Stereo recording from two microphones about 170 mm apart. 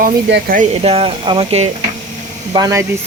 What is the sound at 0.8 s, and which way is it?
Speech, 35° right (ahead or behind).